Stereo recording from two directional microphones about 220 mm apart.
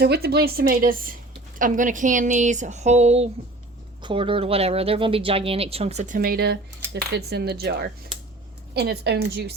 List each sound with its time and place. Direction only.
0.0 s speech: 45° right (ahead or behind)